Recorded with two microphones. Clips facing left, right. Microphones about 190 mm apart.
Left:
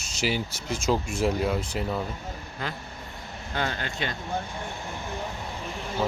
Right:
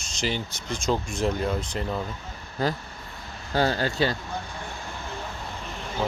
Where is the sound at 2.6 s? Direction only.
35° right (ahead or behind).